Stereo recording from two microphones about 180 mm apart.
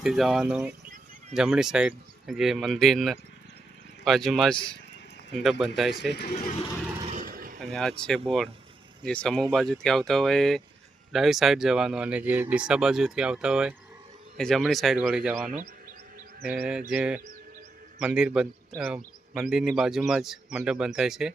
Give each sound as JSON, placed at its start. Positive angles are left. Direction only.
{"t": 0.0, "sound": "speech", "side_deg": 0}
{"t": 6.1, "sound": "speech", "side_deg": 65}
{"t": 7.1, "sound": "vehicle", "side_deg": -50}
{"t": 7.6, "sound": "speech", "side_deg": 5}